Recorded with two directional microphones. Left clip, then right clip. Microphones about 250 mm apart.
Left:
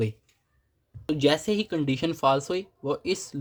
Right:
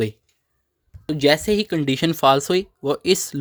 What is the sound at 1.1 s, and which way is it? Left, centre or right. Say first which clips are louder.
Speech: right 6 dB; right.